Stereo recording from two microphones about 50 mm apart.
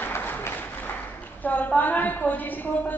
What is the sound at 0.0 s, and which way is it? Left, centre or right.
Applause, left.